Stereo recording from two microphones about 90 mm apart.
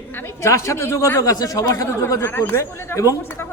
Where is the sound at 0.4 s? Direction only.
30° left (ahead or behind).